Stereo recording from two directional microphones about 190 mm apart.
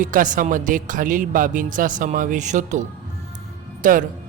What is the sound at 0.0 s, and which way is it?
Speech, 45° right (ahead or behind).